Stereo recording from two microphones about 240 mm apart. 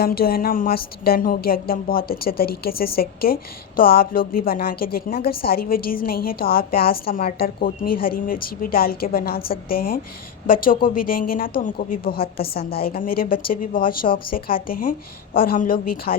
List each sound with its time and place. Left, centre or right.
0.0 s a woman's voice: left
12.2 s a woman's voice: left
12.5 s a woman's voice: left